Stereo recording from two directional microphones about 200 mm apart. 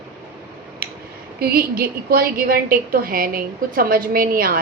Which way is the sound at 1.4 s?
50° right (ahead or behind).